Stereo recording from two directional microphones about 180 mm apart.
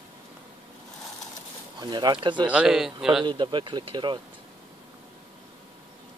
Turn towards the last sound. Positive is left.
turn(degrees=-25)  # may be behind; listen again after turning